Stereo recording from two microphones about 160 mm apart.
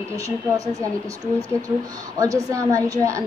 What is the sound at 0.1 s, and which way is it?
Speech, 20° right (ahead or behind).